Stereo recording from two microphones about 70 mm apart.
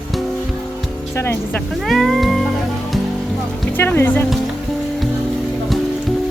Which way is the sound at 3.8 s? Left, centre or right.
Left.